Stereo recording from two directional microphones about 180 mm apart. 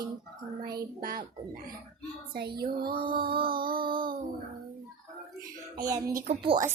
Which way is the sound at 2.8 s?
50° right (ahead or behind).